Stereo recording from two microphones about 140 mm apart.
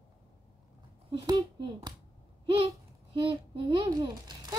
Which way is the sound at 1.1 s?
30° right (ahead or behind).